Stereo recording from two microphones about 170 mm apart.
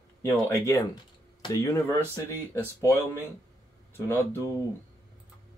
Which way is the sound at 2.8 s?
15° left (ahead or behind).